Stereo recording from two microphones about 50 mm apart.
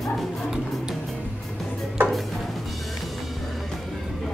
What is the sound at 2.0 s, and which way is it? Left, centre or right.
Music, right.